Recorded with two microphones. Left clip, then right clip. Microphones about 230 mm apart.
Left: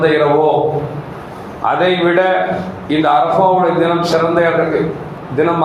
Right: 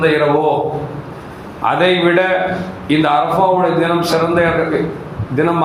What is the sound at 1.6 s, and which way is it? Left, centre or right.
A man's voice, right.